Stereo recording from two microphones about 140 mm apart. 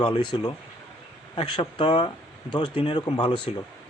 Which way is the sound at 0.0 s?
35° left (ahead or behind).